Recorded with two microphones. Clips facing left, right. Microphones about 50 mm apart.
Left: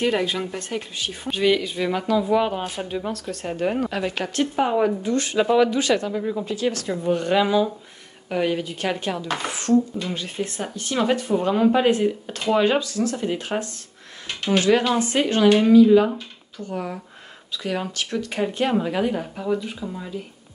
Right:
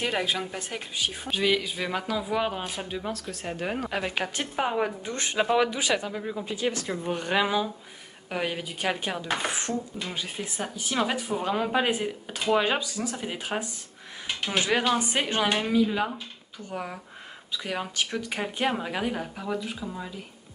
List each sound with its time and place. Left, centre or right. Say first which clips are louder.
0.0 s a woman's voice: left 5 dB; centre
3.9 s speech: left 4 dB; centre
5.0 s speech: left 8 dB; right
5.4 s speech: left 5 dB; centre
6.4 s speech: left 5 dB; centre
8.3 s a woman's voice: left 7 dB; centre; by 10.0 s right
10.0 s speech: left 6 dB; centre
14.2 s a sound: left 7 dB; centre
15.0 s a woman's voice: left 6 dB; centre